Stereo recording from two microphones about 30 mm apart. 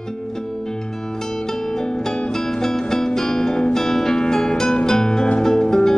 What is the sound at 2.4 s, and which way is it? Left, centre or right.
Music, centre.